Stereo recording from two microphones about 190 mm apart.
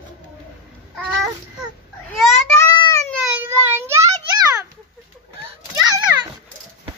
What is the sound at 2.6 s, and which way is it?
Cat, 20° left (ahead or behind).